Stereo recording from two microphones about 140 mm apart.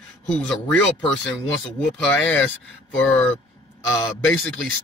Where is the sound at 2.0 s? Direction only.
5° left (ahead or behind).